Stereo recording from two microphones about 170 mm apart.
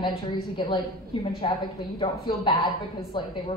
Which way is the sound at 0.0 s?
30° left (ahead or behind).